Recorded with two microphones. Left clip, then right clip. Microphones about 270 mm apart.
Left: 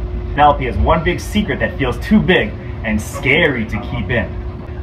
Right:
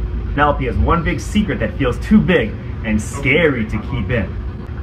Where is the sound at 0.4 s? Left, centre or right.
Centre.